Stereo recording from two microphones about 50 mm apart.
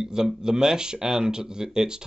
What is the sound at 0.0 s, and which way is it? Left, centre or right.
Speech, centre.